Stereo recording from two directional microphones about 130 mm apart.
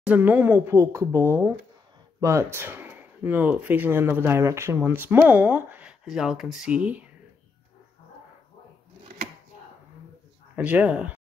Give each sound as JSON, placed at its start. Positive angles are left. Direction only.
{"t": 0.0, "sound": "speech", "side_deg": -10}
{"t": 10.5, "sound": "speech", "side_deg": -10}